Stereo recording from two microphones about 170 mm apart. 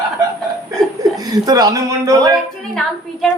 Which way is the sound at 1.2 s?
20° right (ahead or behind).